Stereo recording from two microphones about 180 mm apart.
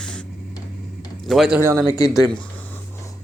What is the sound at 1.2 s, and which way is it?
Speech, centre (ahead or behind).